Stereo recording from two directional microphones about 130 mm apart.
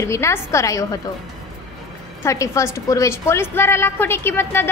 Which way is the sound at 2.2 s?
25° left (ahead or behind).